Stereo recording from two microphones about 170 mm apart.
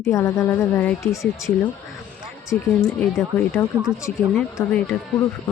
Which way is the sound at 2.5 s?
10° left (ahead or behind).